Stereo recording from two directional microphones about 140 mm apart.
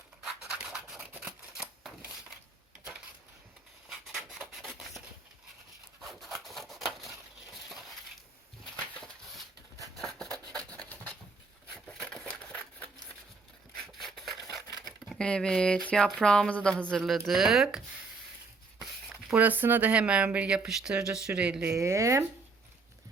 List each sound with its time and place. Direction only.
0.2 s rub: 5° right (ahead or behind)
3.8 s rub: 5° right (ahead or behind)
7.7 s crushing: centre (ahead or behind)
8.7 s a sound: centre (ahead or behind)
13.7 s a sound: centre (ahead or behind)
15.1 s speech: 5° left (ahead or behind)
19.3 s speech: 10° right (ahead or behind)
21.7 s speech: 20° right (ahead or behind)